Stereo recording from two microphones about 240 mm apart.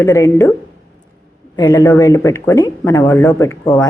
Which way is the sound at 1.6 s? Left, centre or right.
Centre.